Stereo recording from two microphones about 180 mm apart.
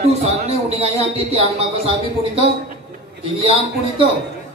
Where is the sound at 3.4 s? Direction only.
30° right (ahead or behind).